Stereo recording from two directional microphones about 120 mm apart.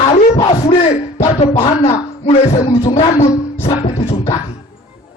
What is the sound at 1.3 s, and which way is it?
A man's voice, 60° left (ahead or behind).